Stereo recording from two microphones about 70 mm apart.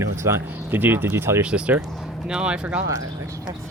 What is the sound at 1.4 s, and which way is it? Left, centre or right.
Speech, centre.